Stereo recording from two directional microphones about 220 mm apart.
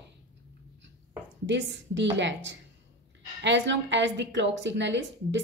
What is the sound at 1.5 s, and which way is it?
A woman's voice, 50° right (ahead or behind).